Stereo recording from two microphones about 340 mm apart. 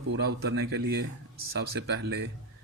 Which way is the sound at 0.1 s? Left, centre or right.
Right.